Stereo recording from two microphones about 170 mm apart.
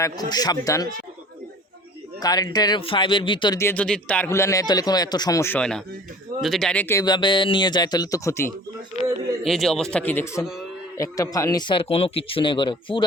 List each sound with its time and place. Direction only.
0.0 s a man's voice: 20° left (ahead or behind)
2.2 s a man's voice: 25° left (ahead or behind)
3.6 s speech: 10° left (ahead or behind)
7.0 s a man's voice: 25° left (ahead or behind)
9.4 s a man's voice: centre (ahead or behind); by 13.1 s 30° left (ahead or behind)